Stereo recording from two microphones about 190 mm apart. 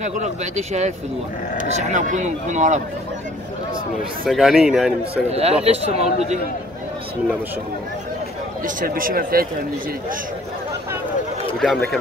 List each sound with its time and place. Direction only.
0.0 s speech: 40° right (ahead or behind)
4.3 s a man's voice: centre (ahead or behind)
5.3 s speech: 35° right (ahead or behind)
8.6 s speech: 45° right (ahead or behind)
11.6 s a man's voice: centre (ahead or behind)